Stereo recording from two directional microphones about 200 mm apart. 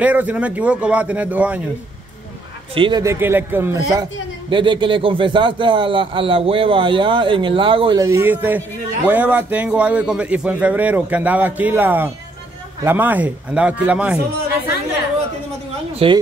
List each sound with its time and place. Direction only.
0.0 s a man's voice: 5° right (ahead or behind)
2.7 s a man's voice: 25° right (ahead or behind)
4.5 s a man's voice: 25° right (ahead or behind); by 14.1 s 5° right (ahead or behind)
16.0 s speech: 30° right (ahead or behind)